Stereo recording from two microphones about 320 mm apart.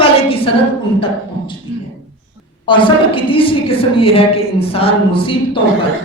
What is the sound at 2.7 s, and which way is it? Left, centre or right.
A woman's voice, centre.